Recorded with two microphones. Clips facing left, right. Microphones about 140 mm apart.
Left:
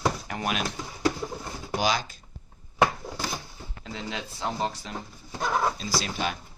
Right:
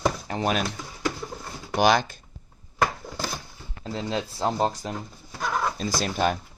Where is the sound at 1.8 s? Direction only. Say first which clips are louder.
Right 7 dB; 55° right (ahead or behind).